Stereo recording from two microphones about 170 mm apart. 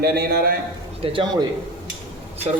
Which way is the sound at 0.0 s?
65° right (ahead or behind).